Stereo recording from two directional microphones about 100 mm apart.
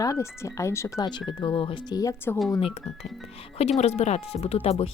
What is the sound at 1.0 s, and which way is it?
Speech, 45° left (ahead or behind).